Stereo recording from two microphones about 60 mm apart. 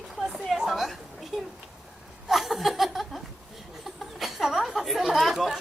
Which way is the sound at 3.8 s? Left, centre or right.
Centre.